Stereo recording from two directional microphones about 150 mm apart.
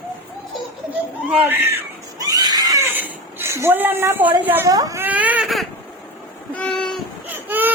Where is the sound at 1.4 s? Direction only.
15° right (ahead or behind).